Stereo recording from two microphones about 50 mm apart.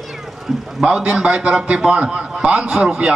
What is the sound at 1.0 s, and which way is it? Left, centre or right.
A man's voice, right.